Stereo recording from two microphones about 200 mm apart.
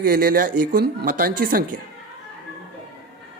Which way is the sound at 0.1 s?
45° right (ahead or behind).